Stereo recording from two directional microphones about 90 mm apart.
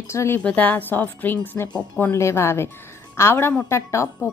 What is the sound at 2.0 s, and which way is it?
A woman's voice, 30° left (ahead or behind).